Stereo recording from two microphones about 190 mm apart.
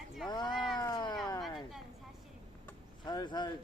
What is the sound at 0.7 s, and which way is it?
Speech, 20° left (ahead or behind).